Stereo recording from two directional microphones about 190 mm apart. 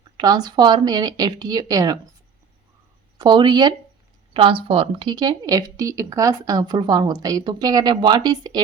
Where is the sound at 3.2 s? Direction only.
25° right (ahead or behind).